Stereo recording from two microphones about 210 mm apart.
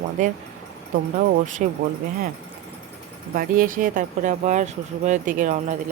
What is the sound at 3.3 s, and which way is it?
Speech, 40° right (ahead or behind).